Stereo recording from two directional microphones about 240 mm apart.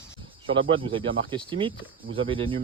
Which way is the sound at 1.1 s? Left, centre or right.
Right.